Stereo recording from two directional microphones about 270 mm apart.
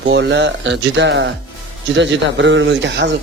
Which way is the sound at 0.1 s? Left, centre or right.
Right.